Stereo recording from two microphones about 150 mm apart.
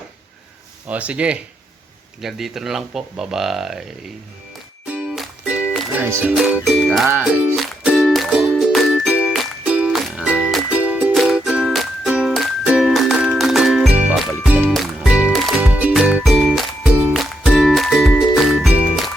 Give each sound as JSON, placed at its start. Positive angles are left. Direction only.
{"t": 0.9, "sound": "speech", "side_deg": -10}
{"t": 4.9, "sound": "music", "side_deg": -5}
{"t": 6.2, "sound": "speech", "side_deg": -5}
{"t": 7.2, "sound": "music", "side_deg": 0}